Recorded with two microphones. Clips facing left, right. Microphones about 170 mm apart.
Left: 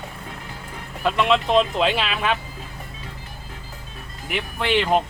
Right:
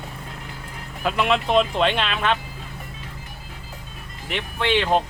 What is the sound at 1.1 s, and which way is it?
Speech, centre (ahead or behind).